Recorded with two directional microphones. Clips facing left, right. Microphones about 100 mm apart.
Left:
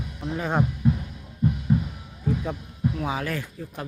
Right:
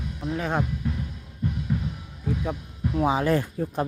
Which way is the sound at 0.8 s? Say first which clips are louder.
Left 7 dB; 20° left (ahead or behind).